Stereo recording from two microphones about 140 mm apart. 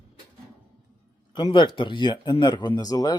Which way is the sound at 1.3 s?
35° left (ahead or behind).